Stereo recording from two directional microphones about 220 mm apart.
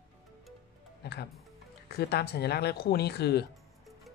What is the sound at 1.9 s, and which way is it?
Speech, 45° left (ahead or behind).